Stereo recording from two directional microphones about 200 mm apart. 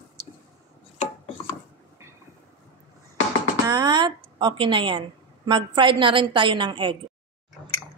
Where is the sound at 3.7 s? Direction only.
20° right (ahead or behind).